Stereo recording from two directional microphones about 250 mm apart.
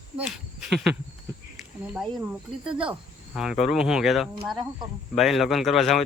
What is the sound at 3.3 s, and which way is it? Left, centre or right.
Speech, centre.